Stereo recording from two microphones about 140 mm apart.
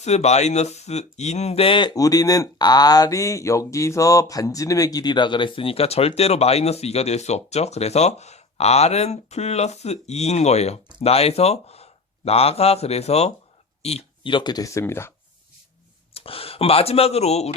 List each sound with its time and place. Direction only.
0.0 s a man's voice: 55° left (ahead or behind)
13.8 s a sound: 50° left (ahead or behind)
14.3 s speech: 30° left (ahead or behind)
16.1 s speech: 40° left (ahead or behind)